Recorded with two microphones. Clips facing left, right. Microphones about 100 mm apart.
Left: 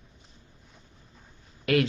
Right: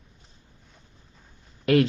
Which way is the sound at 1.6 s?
35° right (ahead or behind).